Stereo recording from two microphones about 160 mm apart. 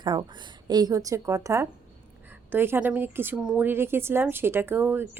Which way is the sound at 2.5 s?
15° right (ahead or behind).